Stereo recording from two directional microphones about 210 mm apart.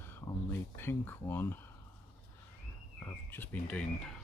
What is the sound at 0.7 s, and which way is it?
Speech, 10° left (ahead or behind).